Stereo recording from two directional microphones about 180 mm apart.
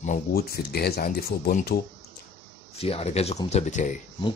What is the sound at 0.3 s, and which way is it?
A man's voice, 60° left (ahead or behind).